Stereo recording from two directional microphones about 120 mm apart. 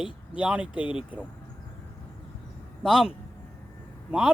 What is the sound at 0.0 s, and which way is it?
Speech, 10° right (ahead or behind).